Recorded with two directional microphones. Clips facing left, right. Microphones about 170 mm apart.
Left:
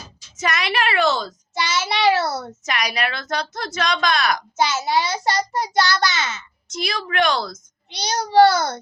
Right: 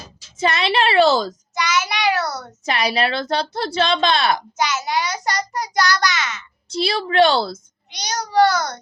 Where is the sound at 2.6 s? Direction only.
30° right (ahead or behind).